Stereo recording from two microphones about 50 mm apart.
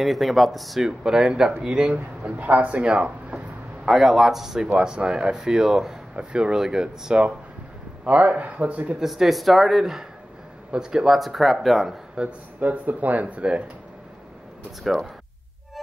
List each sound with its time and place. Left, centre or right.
0.0 s speech: centre; by 3.9 s right
3.9 s speech: centre
8.0 s speech: right
9.0 s speech: centre
11.1 s speech: centre
12.2 s speech: right
14.8 s speech: centre